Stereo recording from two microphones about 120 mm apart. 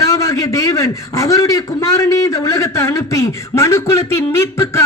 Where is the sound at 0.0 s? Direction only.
25° left (ahead or behind).